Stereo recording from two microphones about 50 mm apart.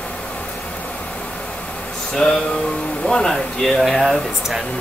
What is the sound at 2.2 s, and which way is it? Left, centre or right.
Music, left.